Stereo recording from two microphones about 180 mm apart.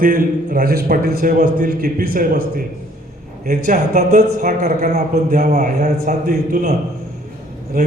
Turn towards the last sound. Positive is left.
turn(degrees=-50)  # may be behind; listen again after turning